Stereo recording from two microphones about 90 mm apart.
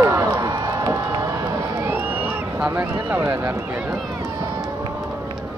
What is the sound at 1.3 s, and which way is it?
Run, 45° right (ahead or behind).